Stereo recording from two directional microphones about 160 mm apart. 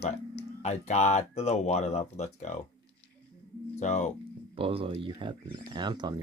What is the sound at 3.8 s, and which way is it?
Speech, 45° left (ahead or behind).